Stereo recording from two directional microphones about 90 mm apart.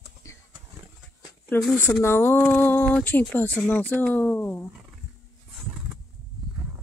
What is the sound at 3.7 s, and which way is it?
Speech, 20° left (ahead or behind).